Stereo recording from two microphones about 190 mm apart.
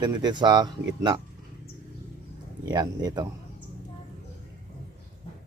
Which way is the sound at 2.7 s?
20° right (ahead or behind).